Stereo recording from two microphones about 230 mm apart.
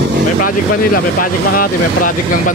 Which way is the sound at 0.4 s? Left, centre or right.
Left.